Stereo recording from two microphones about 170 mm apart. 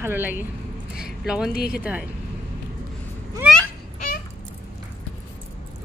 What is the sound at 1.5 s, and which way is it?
Speech, 65° left (ahead or behind).